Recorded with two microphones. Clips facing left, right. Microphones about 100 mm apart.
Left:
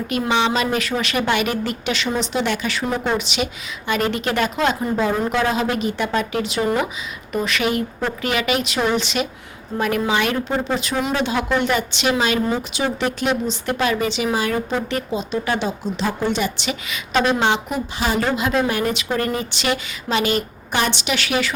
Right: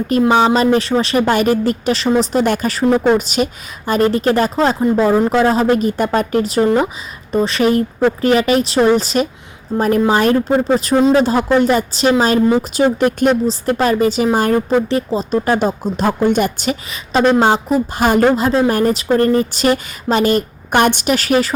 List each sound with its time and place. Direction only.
0.1 s speech: 40° right (ahead or behind)